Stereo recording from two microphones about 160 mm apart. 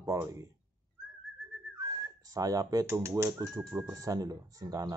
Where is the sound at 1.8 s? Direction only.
20° right (ahead or behind).